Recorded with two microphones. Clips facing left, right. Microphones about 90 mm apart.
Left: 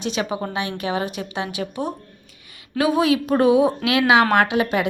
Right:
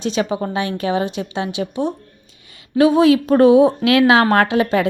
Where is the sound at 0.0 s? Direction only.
35° right (ahead or behind).